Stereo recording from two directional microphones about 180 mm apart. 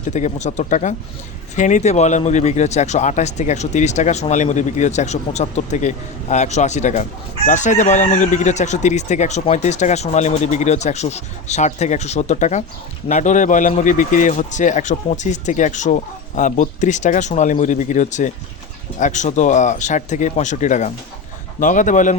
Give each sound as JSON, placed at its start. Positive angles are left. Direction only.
{"t": 0.1, "sound": "a man's voice", "side_deg": 40}